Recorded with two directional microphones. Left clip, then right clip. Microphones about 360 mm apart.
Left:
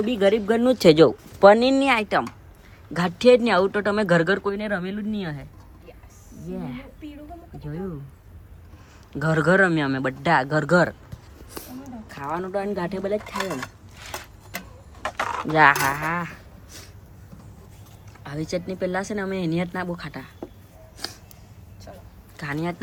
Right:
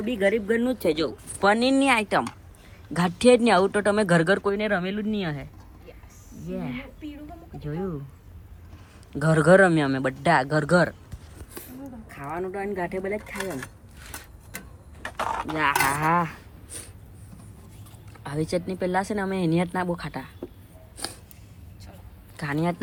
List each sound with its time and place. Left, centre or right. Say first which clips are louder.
0.0 s speech: left 3 dB; centre
1.4 s speech: left 6 dB; centre
9.1 s speech: right 2 dB; centre
12.0 s speech: left 3 dB; centre
13.3 s speech: left 4 dB; left
15.9 s a sound: right 3 dB; centre
18.2 s speech: right 1 dB; centre
21.0 s a sound: left 1 dB; centre
22.4 s speech: right 1 dB; centre